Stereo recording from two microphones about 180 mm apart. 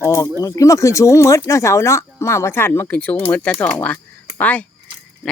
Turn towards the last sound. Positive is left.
turn(degrees=10)  # may be behind; listen again after turning